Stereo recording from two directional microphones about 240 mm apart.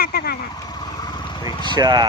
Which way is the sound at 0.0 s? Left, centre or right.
Left.